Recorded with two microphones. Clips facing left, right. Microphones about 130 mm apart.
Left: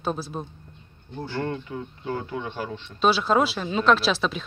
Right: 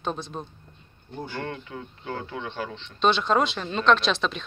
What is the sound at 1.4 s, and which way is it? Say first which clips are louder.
A man's voice: left 7 dB; 20° left (ahead or behind).